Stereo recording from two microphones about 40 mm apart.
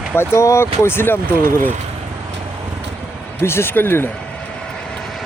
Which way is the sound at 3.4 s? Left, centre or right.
Left.